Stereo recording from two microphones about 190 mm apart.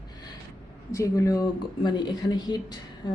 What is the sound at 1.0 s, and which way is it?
Speech, 15° left (ahead or behind).